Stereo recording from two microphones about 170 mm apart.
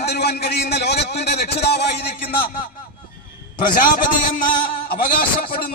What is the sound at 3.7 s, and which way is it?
A man's voice, 55° left (ahead or behind).